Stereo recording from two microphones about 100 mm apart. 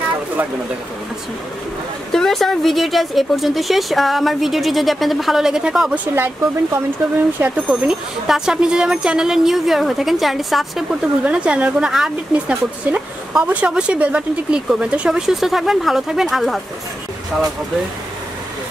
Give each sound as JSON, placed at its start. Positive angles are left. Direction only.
{"t": 2.1, "sound": "speech", "side_deg": 5}
{"t": 6.1, "sound": "speech", "side_deg": -20}
{"t": 7.6, "sound": "speech", "side_deg": -5}